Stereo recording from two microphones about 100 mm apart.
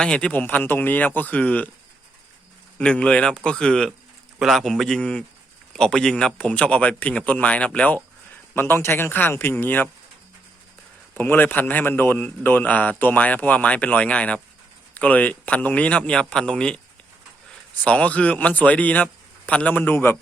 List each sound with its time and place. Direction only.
0.0 s a man's voice: 10° left (ahead or behind)
2.7 s a man's voice: 10° left (ahead or behind)
11.1 s a man's voice: 20° left (ahead or behind)